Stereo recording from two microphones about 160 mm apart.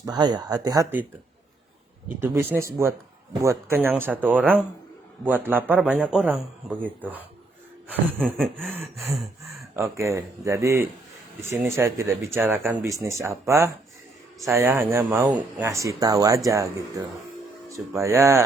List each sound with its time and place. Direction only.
0.0 s speech: 25° right (ahead or behind)
2.2 s a man's voice: 15° right (ahead or behind)
8.2 s chuckle: centre (ahead or behind)
9.7 s a man's voice: 20° right (ahead or behind)